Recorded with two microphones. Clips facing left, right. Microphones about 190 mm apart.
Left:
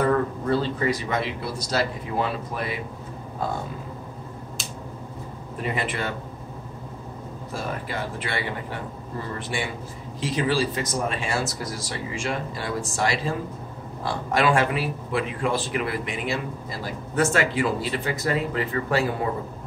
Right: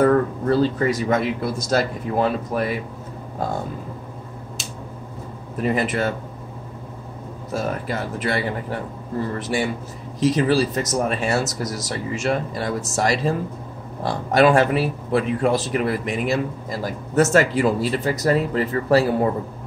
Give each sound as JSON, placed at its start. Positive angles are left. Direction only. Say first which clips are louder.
{"t": 0.0, "sound": "speech", "louder": "right 5 dB", "side_deg": -45}
{"t": 5.6, "sound": "speech", "louder": "right 7 dB", "side_deg": -40}
{"t": 7.5, "sound": "speech", "louder": "right 6 dB", "side_deg": -40}